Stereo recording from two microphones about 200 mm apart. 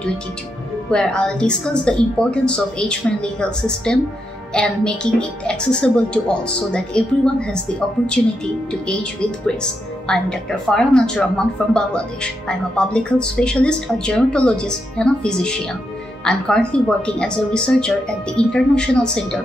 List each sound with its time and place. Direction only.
0.8 s speech: 5° left (ahead or behind)
9.6 s speech: 5° left (ahead or behind)